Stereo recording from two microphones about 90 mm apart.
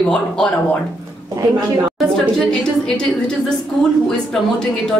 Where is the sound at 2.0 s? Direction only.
5° left (ahead or behind).